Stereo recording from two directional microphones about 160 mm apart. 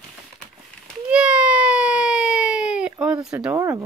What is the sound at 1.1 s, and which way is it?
Baby cry, 5° right (ahead or behind).